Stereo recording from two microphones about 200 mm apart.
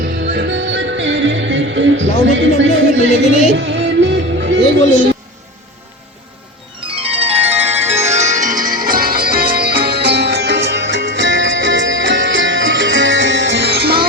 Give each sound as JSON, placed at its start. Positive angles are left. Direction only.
{"t": 0.3, "sound": "music", "side_deg": -60}
{"t": 6.7, "sound": "music", "side_deg": -25}